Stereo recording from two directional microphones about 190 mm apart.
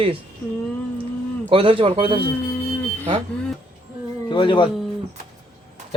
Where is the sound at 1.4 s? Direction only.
30° right (ahead or behind).